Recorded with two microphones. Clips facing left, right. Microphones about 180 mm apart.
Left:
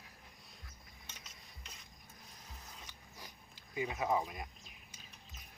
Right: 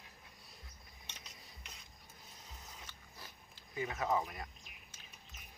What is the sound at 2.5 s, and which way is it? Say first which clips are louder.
Mechanisms: even; centre (ahead or behind).